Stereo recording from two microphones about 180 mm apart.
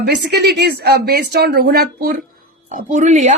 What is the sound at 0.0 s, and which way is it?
Speech, 65° right (ahead or behind).